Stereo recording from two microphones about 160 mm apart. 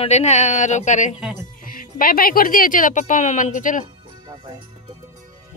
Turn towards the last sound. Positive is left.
turn(degrees=55)  # may be behind; listen again after turning